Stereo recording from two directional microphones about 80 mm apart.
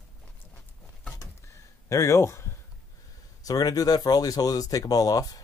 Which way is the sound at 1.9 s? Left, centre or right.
Left.